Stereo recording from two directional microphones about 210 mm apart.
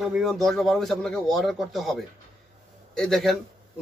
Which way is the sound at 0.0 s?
Centre (ahead or behind).